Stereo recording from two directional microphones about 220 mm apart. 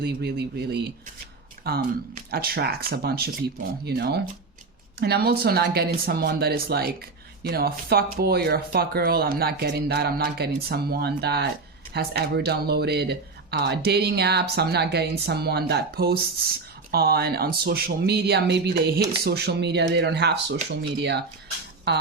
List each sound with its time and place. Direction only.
0.0 s speech: 50° right (ahead or behind)